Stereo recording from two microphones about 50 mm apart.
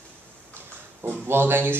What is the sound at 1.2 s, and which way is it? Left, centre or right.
Speech, right.